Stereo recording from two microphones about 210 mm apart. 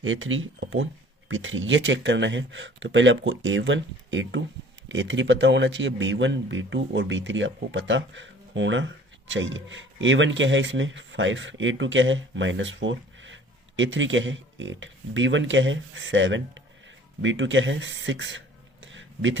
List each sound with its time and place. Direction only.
0.0 s speech: 70° right (ahead or behind)